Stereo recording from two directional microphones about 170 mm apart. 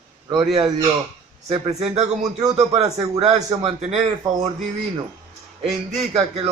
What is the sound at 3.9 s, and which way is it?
Speech, 40° right (ahead or behind).